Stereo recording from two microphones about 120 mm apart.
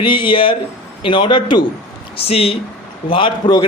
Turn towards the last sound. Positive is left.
turn(degrees=40)  # may be behind; listen again after turning